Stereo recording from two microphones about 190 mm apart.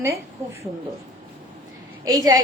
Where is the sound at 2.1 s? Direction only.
20° right (ahead or behind).